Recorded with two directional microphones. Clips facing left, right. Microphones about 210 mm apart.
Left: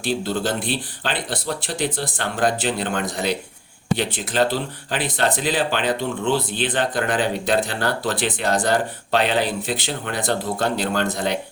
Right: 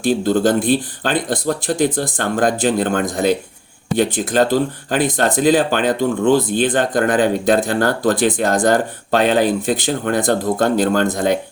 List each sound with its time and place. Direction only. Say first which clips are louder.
0.0 s speech: right 8 dB; 45° right (ahead or behind)